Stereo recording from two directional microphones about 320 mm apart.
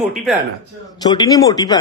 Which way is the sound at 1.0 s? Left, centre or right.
Centre.